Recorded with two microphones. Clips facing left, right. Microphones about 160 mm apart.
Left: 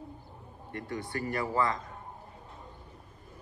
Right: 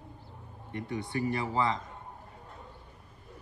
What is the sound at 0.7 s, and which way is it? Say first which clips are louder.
Speech: right 1 dB; 20° right (ahead or behind).